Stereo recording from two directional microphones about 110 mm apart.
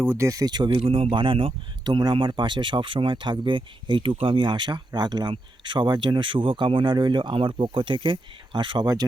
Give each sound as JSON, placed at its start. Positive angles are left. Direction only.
{"t": 0.0, "sound": "speech", "side_deg": -25}
{"t": 0.8, "sound": "speech", "side_deg": -60}